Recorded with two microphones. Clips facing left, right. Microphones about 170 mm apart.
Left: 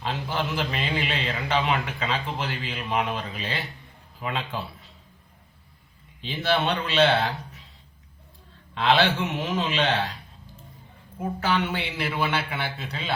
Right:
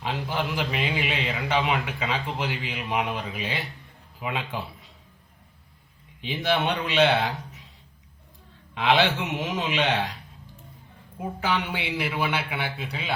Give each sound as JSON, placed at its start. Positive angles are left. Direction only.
{"t": 0.0, "sound": "a man's voice", "side_deg": -10}
{"t": 6.2, "sound": "a man's voice", "side_deg": -15}
{"t": 8.7, "sound": "a man's voice", "side_deg": -15}
{"t": 11.2, "sound": "a man's voice", "side_deg": -15}